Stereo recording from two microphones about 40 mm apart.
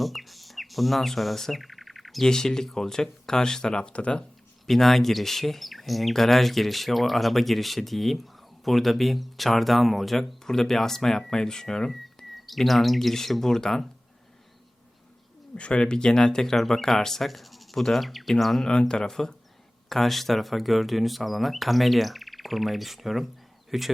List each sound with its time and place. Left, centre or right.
0.0 s bird: centre
2.2 s speech: centre
4.6 s speech: centre
11.9 s speech: centre
15.5 s speech: left; by 18.7 s centre
18.7 s speech: left; by 23.9 s centre